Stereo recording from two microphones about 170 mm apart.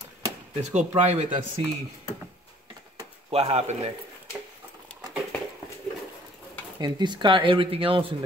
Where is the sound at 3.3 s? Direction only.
35° right (ahead or behind).